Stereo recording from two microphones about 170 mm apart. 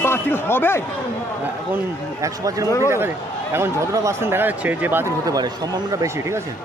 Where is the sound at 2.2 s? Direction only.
20° right (ahead or behind).